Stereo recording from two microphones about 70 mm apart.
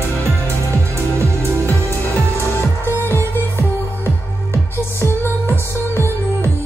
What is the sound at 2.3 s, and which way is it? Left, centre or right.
Music, left.